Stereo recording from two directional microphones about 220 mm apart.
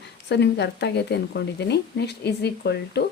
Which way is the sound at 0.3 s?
50° left (ahead or behind).